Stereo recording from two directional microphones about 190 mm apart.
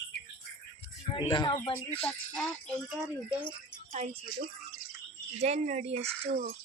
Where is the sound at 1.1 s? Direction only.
25° left (ahead or behind).